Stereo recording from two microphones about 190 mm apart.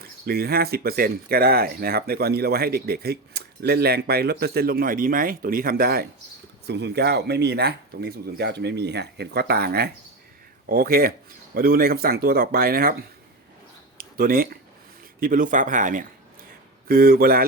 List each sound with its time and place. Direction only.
0.0 s speech: 55° right (ahead or behind)